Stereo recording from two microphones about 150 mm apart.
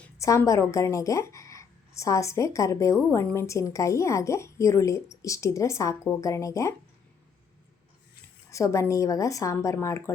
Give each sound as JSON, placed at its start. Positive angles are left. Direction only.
{"t": 0.2, "sound": "a woman's voice", "side_deg": 20}
{"t": 8.4, "sound": "a woman's voice", "side_deg": 20}